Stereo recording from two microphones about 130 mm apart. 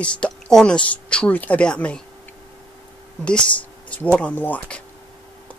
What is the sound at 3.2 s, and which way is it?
Speech, 5° left (ahead or behind).